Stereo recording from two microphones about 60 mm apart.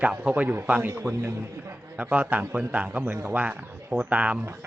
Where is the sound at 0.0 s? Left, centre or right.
Right.